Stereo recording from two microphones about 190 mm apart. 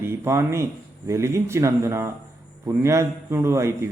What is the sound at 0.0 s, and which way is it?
A man's voice, 15° right (ahead or behind).